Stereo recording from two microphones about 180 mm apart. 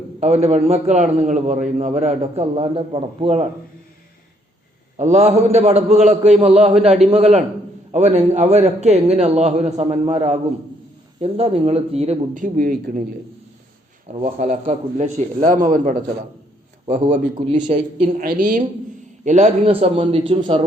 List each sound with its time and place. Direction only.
0.2 s a man's voice: 35° right (ahead or behind)
4.9 s a man's voice: 40° right (ahead or behind)
12.3 s a man's voice: 50° right (ahead or behind)
14.3 s a man's voice: 45° right (ahead or behind)
17.3 s a man's voice: 30° right (ahead or behind)
18.2 s a man's voice: 50° right (ahead or behind); by 20.7 s 30° right (ahead or behind)